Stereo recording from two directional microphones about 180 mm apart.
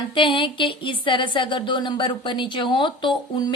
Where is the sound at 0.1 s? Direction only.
25° left (ahead or behind).